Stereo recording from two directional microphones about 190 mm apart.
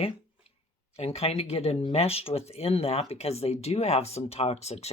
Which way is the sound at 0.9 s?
35° left (ahead or behind).